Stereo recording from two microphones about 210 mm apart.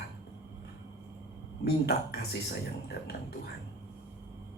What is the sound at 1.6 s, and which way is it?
Speech, 50° left (ahead or behind).